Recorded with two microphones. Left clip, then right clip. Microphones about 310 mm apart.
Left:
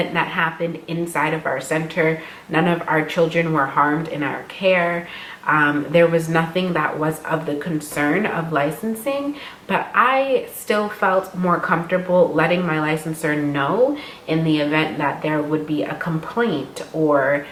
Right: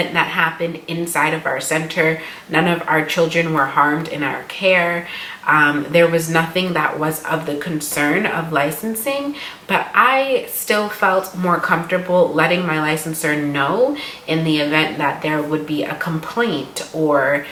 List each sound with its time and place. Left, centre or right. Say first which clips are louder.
0.0 s a woman's voice: right 3 dB; centre
12.1 s speech: right 1 dB; left
12.4 s a woman's voice: right 2 dB; centre